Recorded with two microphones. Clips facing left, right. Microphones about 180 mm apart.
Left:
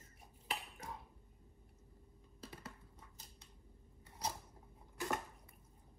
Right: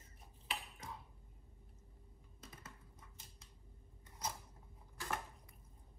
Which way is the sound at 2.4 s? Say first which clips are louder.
Left 5 dB; 30° left (ahead or behind).